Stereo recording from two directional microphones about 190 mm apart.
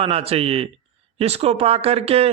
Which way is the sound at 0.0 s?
30° right (ahead or behind).